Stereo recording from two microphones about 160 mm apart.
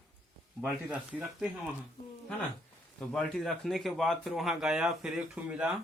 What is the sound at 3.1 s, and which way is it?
Speech, centre (ahead or behind).